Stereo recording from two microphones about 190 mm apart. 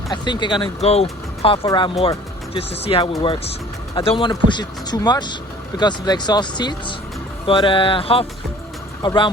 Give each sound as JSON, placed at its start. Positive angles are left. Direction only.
{"t": 0.1, "sound": "speech", "side_deg": 25}